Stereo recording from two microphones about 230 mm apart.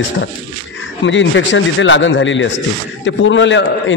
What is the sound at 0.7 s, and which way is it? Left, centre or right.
A man's voice, left.